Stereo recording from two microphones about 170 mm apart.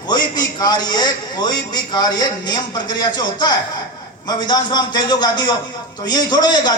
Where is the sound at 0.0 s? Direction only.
25° left (ahead or behind).